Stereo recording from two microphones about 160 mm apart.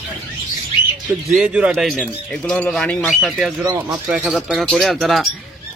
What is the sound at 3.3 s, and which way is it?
Speech, 10° right (ahead or behind).